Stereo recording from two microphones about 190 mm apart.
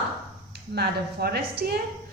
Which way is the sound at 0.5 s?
55° right (ahead or behind).